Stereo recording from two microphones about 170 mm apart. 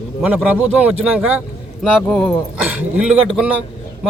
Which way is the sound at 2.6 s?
10° right (ahead or behind).